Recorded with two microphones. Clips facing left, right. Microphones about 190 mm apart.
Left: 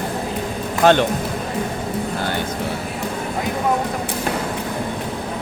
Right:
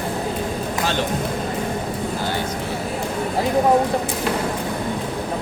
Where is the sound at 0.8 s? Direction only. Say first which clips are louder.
Left 10 dB; 60° left (ahead or behind).